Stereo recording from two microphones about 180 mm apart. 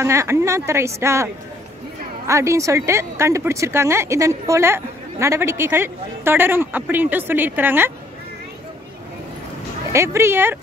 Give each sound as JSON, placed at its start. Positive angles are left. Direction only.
{"t": 0.0, "sound": "speech", "side_deg": -15}
{"t": 9.9, "sound": "speech", "side_deg": -15}